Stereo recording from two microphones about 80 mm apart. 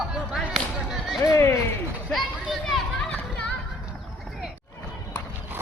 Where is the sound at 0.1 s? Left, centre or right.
Centre.